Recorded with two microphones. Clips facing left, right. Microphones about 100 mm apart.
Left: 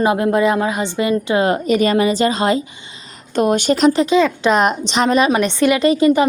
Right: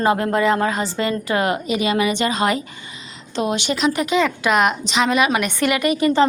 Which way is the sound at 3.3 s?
45° left (ahead or behind).